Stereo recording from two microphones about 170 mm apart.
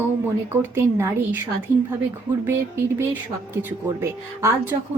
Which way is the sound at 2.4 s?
15° right (ahead or behind).